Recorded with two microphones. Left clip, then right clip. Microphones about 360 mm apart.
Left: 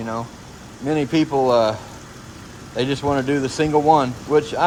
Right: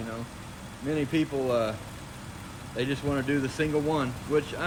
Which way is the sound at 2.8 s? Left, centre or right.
Centre.